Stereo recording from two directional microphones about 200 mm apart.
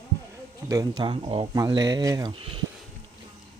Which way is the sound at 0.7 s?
20° right (ahead or behind).